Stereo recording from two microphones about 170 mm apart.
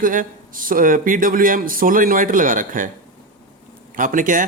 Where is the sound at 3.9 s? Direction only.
50° right (ahead or behind).